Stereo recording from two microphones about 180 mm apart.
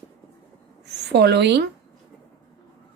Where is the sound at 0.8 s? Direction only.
70° right (ahead or behind).